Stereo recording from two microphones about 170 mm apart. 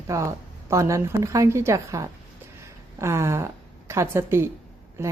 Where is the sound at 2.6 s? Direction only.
15° right (ahead or behind).